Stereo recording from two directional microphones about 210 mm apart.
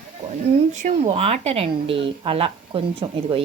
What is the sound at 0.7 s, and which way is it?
Speech, 35° right (ahead or behind).